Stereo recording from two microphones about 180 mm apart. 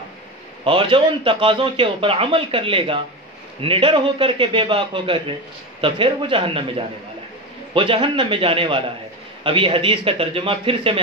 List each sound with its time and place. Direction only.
0.7 s a man's voice: 30° right (ahead or behind)